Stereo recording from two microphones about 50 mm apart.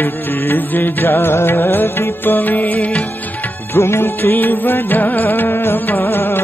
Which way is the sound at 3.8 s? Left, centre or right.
Left.